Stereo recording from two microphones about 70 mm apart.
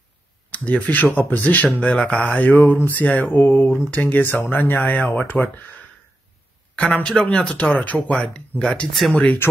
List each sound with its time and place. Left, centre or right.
0.5 s speech: centre